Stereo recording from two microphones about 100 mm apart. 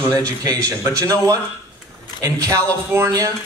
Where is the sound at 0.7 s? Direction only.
30° right (ahead or behind).